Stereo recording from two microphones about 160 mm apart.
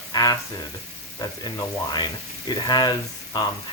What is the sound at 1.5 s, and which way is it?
Speech, 25° left (ahead or behind).